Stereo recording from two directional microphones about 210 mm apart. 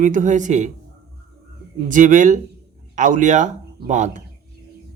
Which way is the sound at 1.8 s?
40° right (ahead or behind).